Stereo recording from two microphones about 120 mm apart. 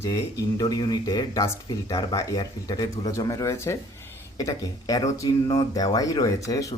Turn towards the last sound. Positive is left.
turn(degrees=30)  # may be behind; listen again after turning